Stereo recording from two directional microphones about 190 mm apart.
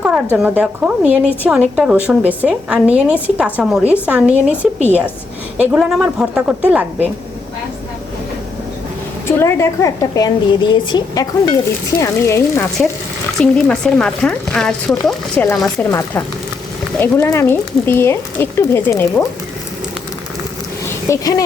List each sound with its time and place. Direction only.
0.3 s a woman's voice: 5° right (ahead or behind)
5.5 s speech: 5° right (ahead or behind)
9.2 s a woman's voice: 15° left (ahead or behind)
13.4 s speech: 5° left (ahead or behind)
15.9 s speech: 10° left (ahead or behind)
21.1 s a woman's voice: 20° left (ahead or behind)